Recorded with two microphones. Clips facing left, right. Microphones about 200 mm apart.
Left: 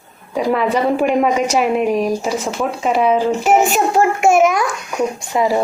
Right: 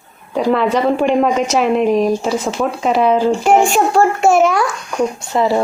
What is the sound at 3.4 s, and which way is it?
Speech, 5° left (ahead or behind).